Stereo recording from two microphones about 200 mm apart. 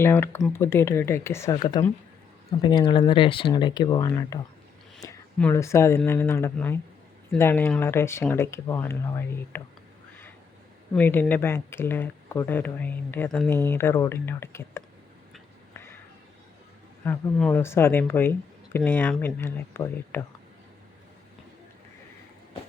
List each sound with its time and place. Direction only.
0.0 s speech: 10° left (ahead or behind)
5.4 s speech: 15° left (ahead or behind)
10.9 s speech: 10° left (ahead or behind)
15.7 s a sound: 10° left (ahead or behind)
17.0 s speech: 5° left (ahead or behind)